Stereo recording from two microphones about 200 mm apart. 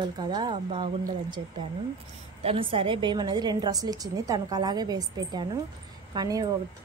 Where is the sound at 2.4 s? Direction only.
25° right (ahead or behind).